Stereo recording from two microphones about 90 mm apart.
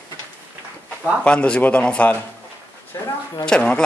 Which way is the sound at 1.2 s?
10° left (ahead or behind).